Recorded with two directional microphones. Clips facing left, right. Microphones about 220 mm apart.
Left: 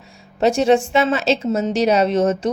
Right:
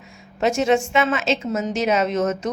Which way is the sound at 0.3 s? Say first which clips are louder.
Left 4 dB; 35° left (ahead or behind).